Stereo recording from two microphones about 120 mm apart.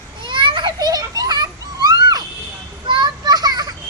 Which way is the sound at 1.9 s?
35° right (ahead or behind).